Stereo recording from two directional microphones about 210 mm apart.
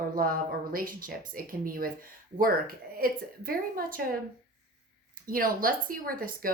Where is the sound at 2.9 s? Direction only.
45° right (ahead or behind).